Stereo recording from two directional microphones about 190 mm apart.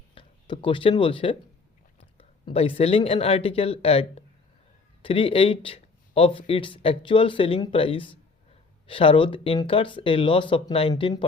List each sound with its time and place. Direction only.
0.1 s speech: 25° left (ahead or behind)
5.0 s speech: 30° left (ahead or behind)